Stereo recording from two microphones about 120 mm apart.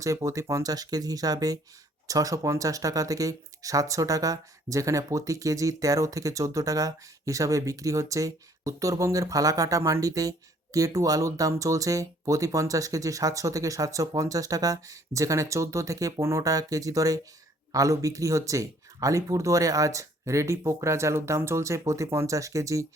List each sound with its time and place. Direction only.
0.0 s speech: 25° right (ahead or behind)